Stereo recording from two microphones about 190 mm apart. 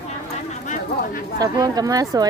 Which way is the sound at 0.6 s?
40° left (ahead or behind).